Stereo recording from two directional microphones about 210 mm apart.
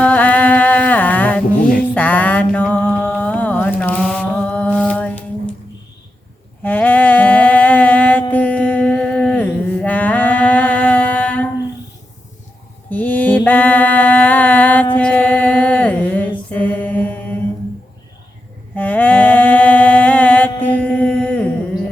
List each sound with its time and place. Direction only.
0.0 s mantra: 5° left (ahead or behind)
6.6 s a sound: 10° left (ahead or behind)
12.9 s mantra: 10° left (ahead or behind)
14.9 s music: 5° left (ahead or behind)
16.5 s mantra: 10° left (ahead or behind)
18.8 s mantra: 10° left (ahead or behind)
20.6 s music: 5° left (ahead or behind)